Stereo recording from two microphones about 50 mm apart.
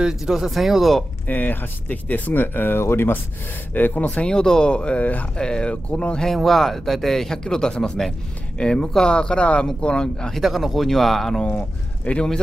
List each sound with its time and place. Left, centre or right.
0.0 s speech: centre
1.2 s speech: left
2.8 s speech: left
3.7 s speech: left
4.1 s speech: centre; by 5.2 s left
5.4 s speech: centre
6.2 s speech: centre
10.3 s speech: centre
11.4 s speech: left